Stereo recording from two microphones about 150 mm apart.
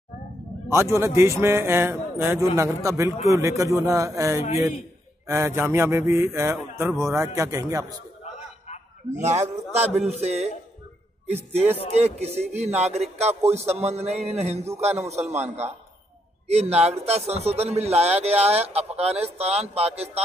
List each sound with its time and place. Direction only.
0.7 s speech: 20° right (ahead or behind)
9.1 s a man's voice: 50° right (ahead or behind)